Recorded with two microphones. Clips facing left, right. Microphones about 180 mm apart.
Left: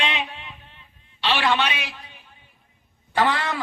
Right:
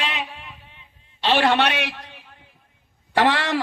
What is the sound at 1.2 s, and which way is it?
A man's voice, 50° right (ahead or behind).